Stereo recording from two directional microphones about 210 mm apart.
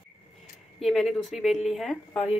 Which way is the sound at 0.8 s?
Centre (ahead or behind).